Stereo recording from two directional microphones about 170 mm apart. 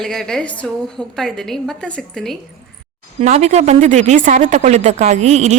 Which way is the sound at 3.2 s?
40° right (ahead or behind).